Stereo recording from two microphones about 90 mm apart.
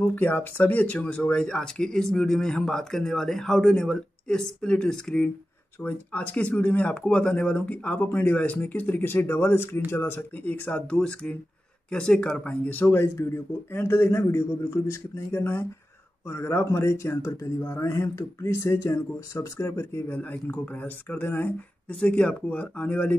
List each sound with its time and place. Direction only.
0.0 s speech: 20° left (ahead or behind)
20.2 s speech: 20° left (ahead or behind)